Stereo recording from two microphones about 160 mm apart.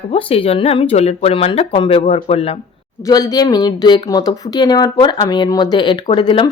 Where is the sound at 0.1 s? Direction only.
35° left (ahead or behind).